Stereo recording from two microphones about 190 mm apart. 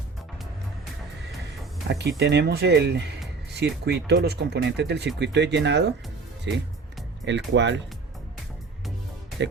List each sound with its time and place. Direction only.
1.9 s speech: 65° right (ahead or behind)